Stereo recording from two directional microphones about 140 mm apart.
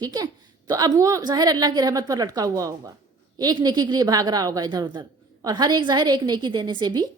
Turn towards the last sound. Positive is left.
turn(degrees=-35)  # may be behind; listen again after turning